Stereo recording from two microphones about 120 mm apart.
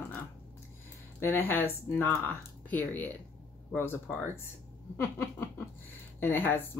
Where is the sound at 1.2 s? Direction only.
15° left (ahead or behind).